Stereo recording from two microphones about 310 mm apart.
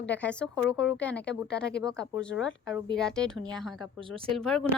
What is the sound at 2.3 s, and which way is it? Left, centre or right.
Speech, left.